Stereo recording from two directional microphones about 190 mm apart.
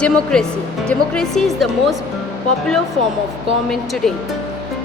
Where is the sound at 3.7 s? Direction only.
Centre (ahead or behind).